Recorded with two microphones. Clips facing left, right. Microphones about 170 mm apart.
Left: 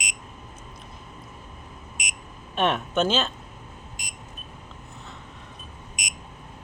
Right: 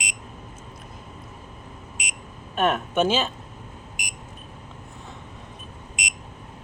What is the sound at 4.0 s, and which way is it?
Beep, 15° right (ahead or behind).